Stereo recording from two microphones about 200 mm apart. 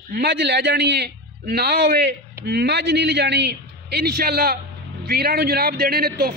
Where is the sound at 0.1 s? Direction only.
55° right (ahead or behind).